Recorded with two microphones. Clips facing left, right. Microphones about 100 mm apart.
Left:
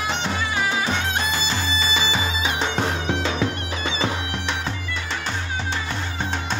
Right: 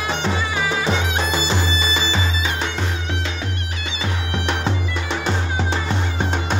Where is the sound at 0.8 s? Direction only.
20° right (ahead or behind).